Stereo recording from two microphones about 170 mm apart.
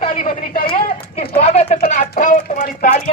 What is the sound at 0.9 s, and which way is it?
Speech, 35° left (ahead or behind).